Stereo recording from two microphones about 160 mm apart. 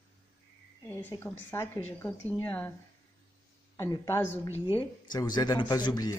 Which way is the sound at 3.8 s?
15° left (ahead or behind).